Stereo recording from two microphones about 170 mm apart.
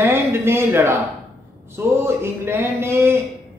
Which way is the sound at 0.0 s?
15° right (ahead or behind).